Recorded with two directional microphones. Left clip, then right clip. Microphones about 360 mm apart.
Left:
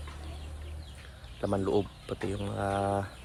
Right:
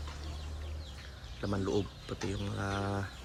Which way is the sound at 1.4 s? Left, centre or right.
Centre.